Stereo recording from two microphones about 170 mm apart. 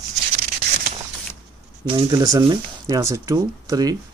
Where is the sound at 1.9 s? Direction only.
25° right (ahead or behind).